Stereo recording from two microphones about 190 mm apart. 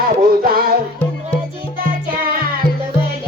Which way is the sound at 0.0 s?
50° right (ahead or behind).